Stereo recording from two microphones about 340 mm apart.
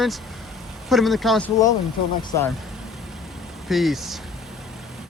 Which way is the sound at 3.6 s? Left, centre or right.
Centre.